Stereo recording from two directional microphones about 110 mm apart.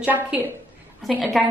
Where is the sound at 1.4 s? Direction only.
Centre (ahead or behind).